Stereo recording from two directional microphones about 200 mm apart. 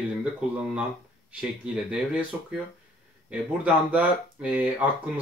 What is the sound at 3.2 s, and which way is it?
Speech, 5° right (ahead or behind).